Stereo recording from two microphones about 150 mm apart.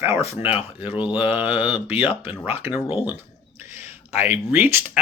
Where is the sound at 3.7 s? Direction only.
15° right (ahead or behind).